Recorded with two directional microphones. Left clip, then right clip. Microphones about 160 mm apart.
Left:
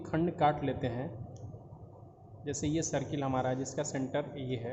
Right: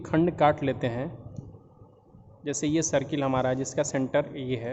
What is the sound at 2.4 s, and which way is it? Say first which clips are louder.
Speech: right 7 dB; 55° right (ahead or behind).